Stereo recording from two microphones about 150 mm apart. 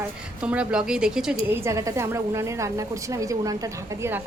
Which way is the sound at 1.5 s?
20° right (ahead or behind).